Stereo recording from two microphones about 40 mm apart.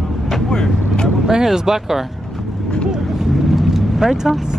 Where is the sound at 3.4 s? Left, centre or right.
Centre.